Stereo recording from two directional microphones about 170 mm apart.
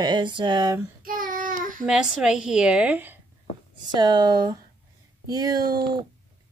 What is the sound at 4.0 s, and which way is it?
A woman's voice, 25° right (ahead or behind).